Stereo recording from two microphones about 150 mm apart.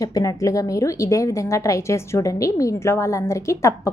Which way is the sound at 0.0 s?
25° left (ahead or behind).